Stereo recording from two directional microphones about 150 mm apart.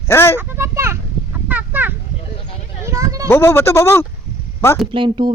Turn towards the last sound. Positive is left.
turn(degrees=-35)  # may be behind; listen again after turning